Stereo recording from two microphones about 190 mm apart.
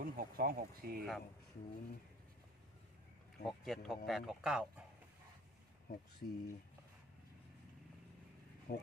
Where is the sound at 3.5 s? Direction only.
Centre (ahead or behind).